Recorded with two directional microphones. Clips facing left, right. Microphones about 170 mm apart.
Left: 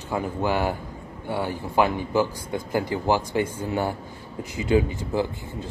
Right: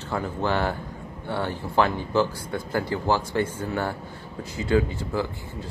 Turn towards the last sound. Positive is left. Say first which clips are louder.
# left 2 dB
turn(degrees=20)  # may be behind; listen again after turning